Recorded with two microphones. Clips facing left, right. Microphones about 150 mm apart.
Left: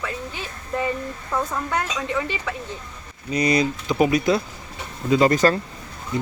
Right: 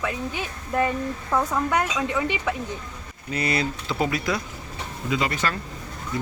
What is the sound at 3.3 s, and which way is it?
Speech, 15° left (ahead or behind).